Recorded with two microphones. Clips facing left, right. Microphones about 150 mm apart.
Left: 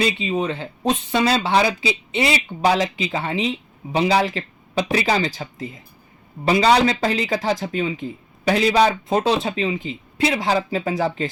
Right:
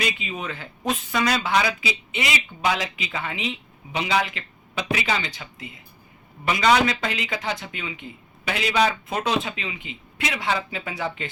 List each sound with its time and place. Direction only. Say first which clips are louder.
0.0 s speech: left 8 dB; 30° left (ahead or behind)